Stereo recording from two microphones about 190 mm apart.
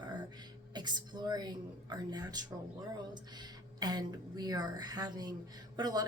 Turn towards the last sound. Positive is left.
turn(degrees=-20)  # may be behind; listen again after turning